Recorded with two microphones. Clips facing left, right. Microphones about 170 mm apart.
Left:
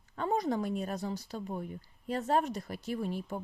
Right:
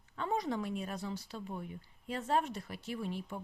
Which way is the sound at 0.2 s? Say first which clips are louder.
Left 4 dB; 40° left (ahead or behind).